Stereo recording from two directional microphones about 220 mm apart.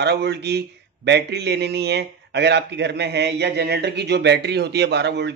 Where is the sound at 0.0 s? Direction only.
50° right (ahead or behind).